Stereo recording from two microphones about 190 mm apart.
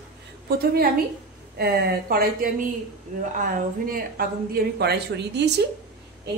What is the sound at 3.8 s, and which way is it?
A woman's voice, 50° right (ahead or behind).